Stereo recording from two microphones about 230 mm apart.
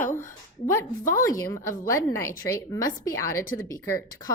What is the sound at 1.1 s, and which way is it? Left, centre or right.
A woman's voice, centre.